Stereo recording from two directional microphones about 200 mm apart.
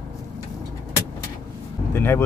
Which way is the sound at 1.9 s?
10° left (ahead or behind).